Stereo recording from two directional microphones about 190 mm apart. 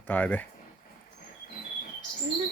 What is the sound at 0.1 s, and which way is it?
Speech, 10° left (ahead or behind).